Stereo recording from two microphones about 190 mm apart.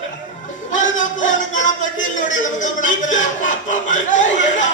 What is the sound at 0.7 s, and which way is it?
Music, 40° left (ahead or behind).